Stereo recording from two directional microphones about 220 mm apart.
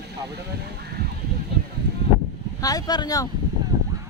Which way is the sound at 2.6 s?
15° left (ahead or behind).